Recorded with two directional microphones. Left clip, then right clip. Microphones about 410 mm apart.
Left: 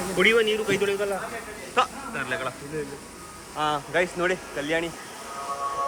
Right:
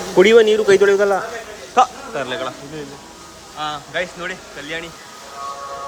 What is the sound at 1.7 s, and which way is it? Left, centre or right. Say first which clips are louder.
Speech: right 9 dB; centre.